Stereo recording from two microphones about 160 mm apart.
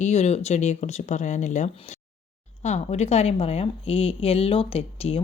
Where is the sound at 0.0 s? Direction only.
45° left (ahead or behind).